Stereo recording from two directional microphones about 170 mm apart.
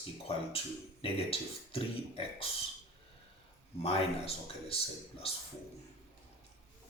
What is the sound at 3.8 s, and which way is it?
Speech, 35° left (ahead or behind).